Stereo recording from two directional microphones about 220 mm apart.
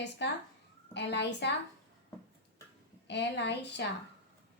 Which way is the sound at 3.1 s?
50° left (ahead or behind).